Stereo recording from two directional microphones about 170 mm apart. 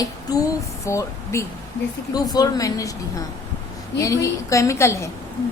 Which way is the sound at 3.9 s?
20° left (ahead or behind).